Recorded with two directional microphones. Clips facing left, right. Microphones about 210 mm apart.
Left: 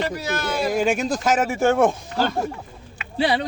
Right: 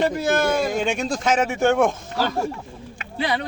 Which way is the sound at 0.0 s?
50° right (ahead or behind).